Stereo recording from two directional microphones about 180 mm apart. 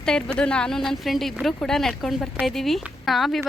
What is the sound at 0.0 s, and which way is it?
Speech, 5° left (ahead or behind).